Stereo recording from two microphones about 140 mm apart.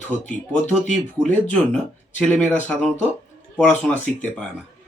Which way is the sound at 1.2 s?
10° left (ahead or behind).